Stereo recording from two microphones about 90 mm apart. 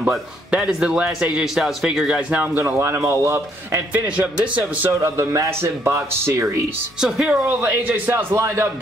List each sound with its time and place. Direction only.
0.5 s speech: 5° right (ahead or behind); by 4.0 s 30° right (ahead or behind)
4.2 s speech: 15° right (ahead or behind)
5.0 s speech: 30° right (ahead or behind)
7.0 s speech: 5° right (ahead or behind)
7.2 s speech: 20° right (ahead or behind)